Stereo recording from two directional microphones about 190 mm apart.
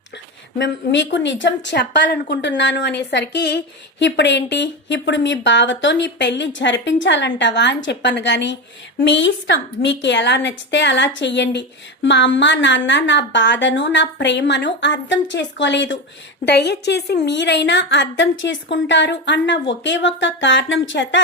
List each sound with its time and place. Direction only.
0.6 s a woman's voice: 70° left (ahead or behind)